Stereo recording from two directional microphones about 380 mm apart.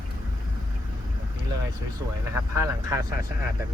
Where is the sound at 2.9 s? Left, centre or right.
Centre.